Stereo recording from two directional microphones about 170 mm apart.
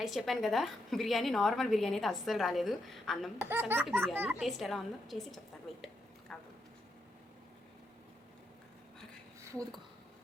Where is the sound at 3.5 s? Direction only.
10° right (ahead or behind).